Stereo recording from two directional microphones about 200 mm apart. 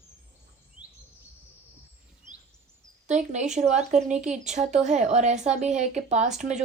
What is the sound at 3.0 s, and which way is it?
A woman's voice, 35° right (ahead or behind).